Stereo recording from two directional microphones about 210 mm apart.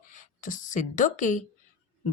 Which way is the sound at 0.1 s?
40° left (ahead or behind).